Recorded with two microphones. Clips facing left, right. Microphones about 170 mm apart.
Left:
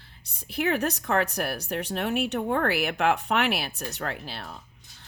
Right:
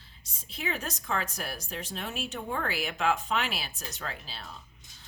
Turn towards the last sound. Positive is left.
turn(degrees=60)  # may be behind; listen again after turning